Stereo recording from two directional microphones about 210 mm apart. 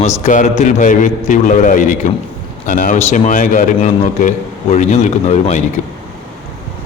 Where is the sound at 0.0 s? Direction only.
35° left (ahead or behind).